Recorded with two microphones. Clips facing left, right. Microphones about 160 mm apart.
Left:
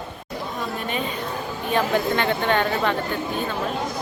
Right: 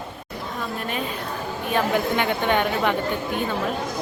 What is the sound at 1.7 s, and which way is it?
A woman's voice, 10° right (ahead or behind).